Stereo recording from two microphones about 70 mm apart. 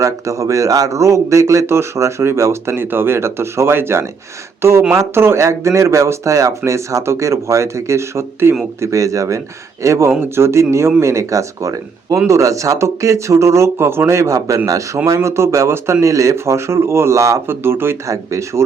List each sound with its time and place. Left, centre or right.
0.0 s speech: right
8.8 s speech: right
18.1 s speech: right